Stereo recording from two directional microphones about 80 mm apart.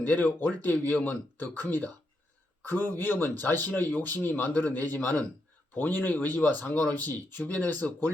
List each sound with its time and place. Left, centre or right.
0.0 s a man's voice: left